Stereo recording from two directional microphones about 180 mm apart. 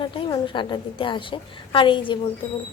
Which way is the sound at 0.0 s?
25° left (ahead or behind).